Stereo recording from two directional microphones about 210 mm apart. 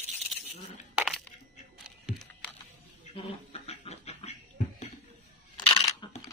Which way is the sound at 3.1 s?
30° left (ahead or behind).